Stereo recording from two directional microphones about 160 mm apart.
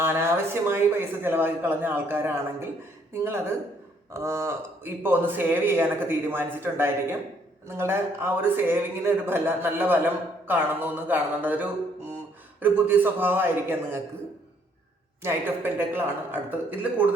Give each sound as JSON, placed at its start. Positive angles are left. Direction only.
{"t": 0.0, "sound": "speech", "side_deg": -15}
{"t": 15.2, "sound": "speech", "side_deg": -15}